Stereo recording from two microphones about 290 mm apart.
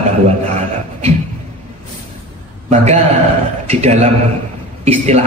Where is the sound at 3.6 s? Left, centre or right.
Right.